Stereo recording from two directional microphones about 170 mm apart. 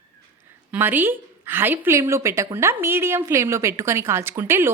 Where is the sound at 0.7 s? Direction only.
10° right (ahead or behind).